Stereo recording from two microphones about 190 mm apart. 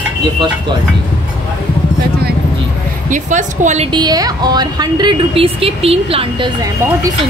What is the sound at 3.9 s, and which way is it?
A woman's voice, 20° right (ahead or behind).